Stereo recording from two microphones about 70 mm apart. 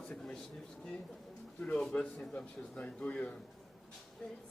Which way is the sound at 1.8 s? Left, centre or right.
Centre.